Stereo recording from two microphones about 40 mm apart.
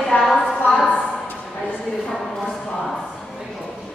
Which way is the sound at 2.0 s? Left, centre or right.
Centre.